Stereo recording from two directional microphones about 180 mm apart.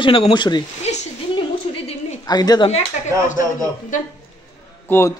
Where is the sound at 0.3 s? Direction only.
25° left (ahead or behind).